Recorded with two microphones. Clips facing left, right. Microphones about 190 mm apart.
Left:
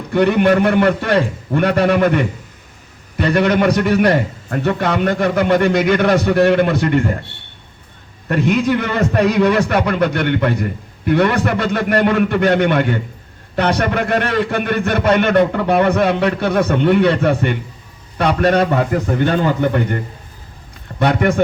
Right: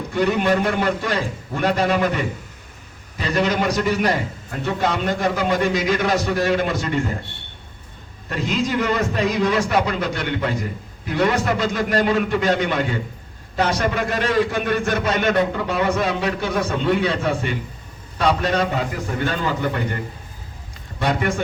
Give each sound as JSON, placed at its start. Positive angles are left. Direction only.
{"t": 0.1, "sound": "a man's voice", "side_deg": 65}
{"t": 8.3, "sound": "a man's voice", "side_deg": 65}
{"t": 21.0, "sound": "a man's voice", "side_deg": 60}